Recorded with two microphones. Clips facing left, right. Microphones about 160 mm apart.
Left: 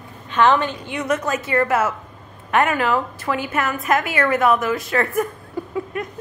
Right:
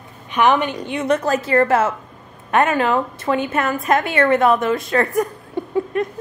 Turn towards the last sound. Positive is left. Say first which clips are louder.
# right 5 dB
turn(degrees=-25)  # may be behind; listen again after turning